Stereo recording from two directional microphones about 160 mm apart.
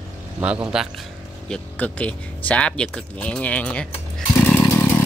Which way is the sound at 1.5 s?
10° left (ahead or behind).